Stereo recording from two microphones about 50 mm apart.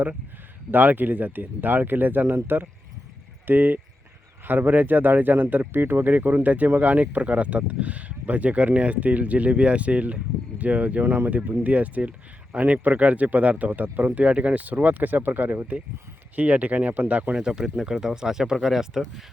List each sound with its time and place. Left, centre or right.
0.7 s speech: right
17.3 s speech: centre